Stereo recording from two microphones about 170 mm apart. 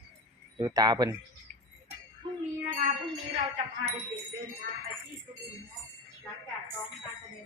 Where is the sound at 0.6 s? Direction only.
20° right (ahead or behind).